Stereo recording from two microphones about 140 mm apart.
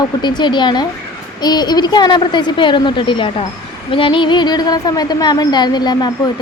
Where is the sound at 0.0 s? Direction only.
30° left (ahead or behind).